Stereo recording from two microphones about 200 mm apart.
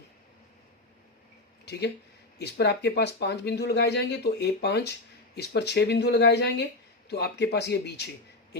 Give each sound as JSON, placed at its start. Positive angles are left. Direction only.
{"t": 2.4, "sound": "speech", "side_deg": 55}